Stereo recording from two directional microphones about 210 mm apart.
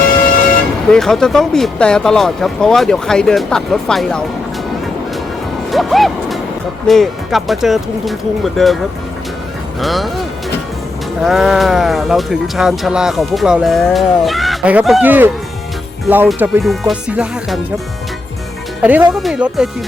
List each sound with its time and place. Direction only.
0.9 s speech: centre (ahead or behind)
5.7 s speech: centre (ahead or behind)
9.8 s speech: centre (ahead or behind)
18.8 s speech: 5° right (ahead or behind)